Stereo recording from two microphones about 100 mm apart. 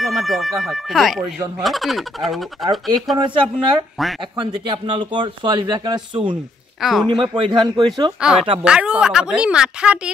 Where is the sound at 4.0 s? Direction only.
Centre (ahead or behind).